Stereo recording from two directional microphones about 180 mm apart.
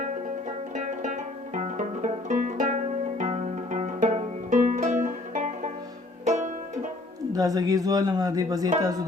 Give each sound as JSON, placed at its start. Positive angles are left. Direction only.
{"t": 0.8, "sound": "music", "side_deg": -45}
{"t": 6.2, "sound": "banjo", "side_deg": -40}
{"t": 7.3, "sound": "speech", "side_deg": -20}